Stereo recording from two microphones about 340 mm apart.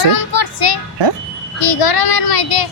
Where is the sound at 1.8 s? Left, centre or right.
Left.